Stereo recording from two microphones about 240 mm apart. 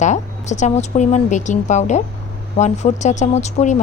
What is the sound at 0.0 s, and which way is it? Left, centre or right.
A woman's voice, left.